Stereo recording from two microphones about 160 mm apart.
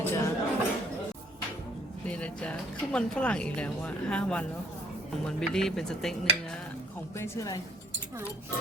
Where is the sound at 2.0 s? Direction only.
10° left (ahead or behind).